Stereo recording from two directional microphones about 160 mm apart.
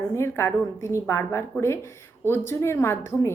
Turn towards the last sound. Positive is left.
turn(degrees=15)  # may be behind; listen again after turning